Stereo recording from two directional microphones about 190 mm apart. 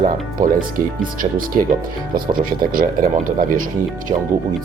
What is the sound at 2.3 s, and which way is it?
Speech, 50° right (ahead or behind).